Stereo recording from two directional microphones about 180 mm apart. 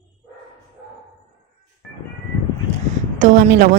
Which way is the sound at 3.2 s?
45° right (ahead or behind).